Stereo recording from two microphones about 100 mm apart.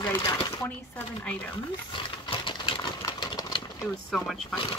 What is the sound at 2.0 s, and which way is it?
Sewing machine, 55° left (ahead or behind).